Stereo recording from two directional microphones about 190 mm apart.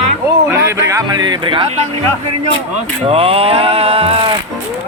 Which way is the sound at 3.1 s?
30° right (ahead or behind).